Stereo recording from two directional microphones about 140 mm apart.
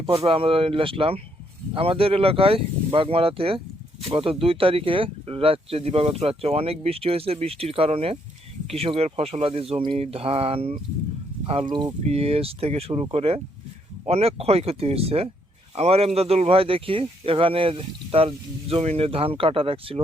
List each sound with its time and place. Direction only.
0.0 s speech: 40° right (ahead or behind)
12.0 s speech: 45° right (ahead or behind)